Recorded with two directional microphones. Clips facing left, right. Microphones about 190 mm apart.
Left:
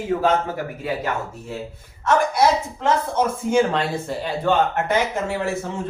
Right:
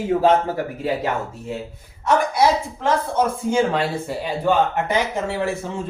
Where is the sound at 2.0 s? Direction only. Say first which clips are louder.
Even; 10° right (ahead or behind).